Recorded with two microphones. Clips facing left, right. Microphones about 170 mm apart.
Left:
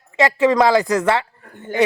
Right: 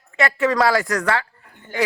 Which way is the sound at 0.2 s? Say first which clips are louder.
Left 4 dB; 20° left (ahead or behind).